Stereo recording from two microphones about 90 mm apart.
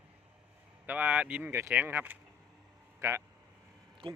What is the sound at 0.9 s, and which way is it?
A man's voice, 15° right (ahead or behind).